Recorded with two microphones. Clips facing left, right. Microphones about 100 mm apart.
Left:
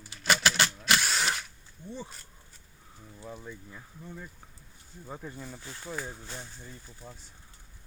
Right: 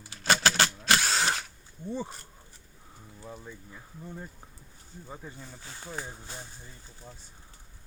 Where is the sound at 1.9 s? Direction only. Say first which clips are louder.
Right 6 dB; 45° right (ahead or behind).